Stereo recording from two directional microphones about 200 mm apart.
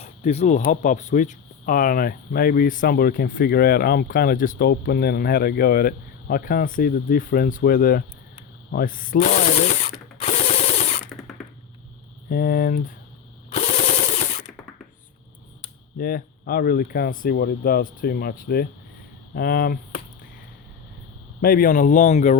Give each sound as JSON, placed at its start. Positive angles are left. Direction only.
{"t": 0.0, "sound": "speech", "side_deg": 30}
{"t": 8.7, "sound": "rub", "side_deg": 45}
{"t": 12.3, "sound": "speech", "side_deg": 50}
{"t": 13.5, "sound": "a sound", "side_deg": 35}
{"t": 16.0, "sound": "speech", "side_deg": 45}
{"t": 21.4, "sound": "speech", "side_deg": 45}